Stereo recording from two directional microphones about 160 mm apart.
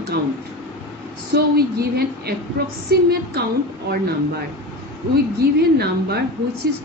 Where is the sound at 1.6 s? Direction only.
75° right (ahead or behind).